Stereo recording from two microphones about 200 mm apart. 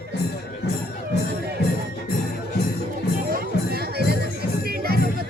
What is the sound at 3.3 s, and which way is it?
Music, 50° right (ahead or behind).